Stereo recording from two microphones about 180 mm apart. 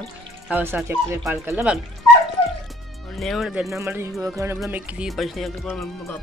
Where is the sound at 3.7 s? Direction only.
15° right (ahead or behind).